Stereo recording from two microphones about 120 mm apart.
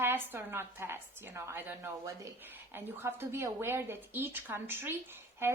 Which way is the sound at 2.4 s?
15° right (ahead or behind).